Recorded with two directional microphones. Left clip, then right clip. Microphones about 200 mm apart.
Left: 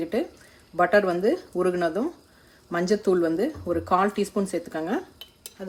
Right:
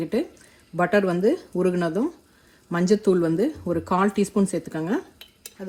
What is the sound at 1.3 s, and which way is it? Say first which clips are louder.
Speech: right 1 dB; 35° right (ahead or behind).